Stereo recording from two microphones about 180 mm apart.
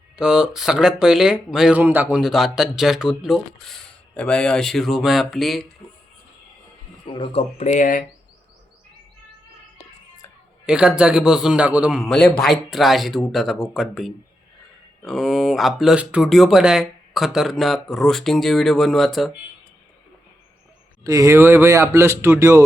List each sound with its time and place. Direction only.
0.2 s speech: 5° right (ahead or behind)
7.1 s speech: 25° left (ahead or behind)
7.6 s speech: 45° left (ahead or behind)
10.7 s speech: 5° right (ahead or behind)
21.0 s speech: 15° right (ahead or behind)